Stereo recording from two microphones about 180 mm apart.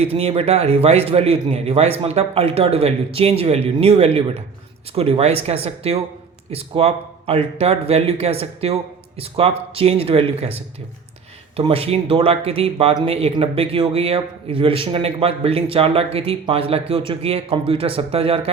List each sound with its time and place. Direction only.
0.0 s speech: 35° right (ahead or behind)